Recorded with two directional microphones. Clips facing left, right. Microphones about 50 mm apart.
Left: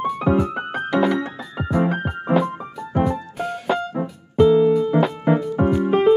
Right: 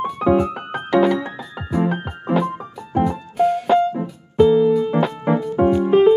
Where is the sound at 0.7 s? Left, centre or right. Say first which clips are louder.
Right 3 dB; centre.